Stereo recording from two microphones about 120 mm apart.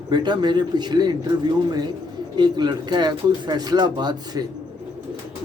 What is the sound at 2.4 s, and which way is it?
Speech, 35° right (ahead or behind).